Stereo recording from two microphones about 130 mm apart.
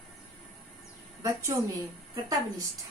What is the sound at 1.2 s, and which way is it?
Speech, 25° right (ahead or behind).